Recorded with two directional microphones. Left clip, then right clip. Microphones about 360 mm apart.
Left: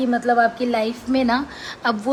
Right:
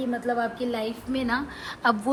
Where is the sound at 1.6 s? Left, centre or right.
Centre.